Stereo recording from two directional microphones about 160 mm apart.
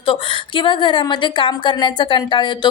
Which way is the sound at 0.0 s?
30° left (ahead or behind).